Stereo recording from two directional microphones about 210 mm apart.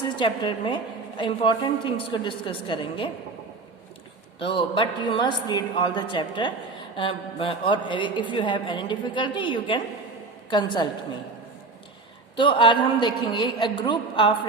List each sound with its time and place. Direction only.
0.0 s a woman's voice: 20° left (ahead or behind)
4.4 s a woman's voice: 25° left (ahead or behind)
12.4 s a woman's voice: 25° left (ahead or behind)